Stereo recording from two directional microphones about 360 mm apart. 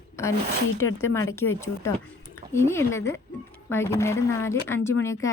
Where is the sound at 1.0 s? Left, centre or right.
Centre.